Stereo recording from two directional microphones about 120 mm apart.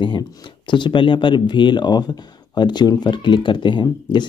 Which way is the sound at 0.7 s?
40° left (ahead or behind).